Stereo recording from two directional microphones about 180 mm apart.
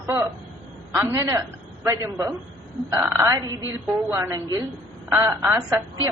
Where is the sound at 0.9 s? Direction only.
15° right (ahead or behind).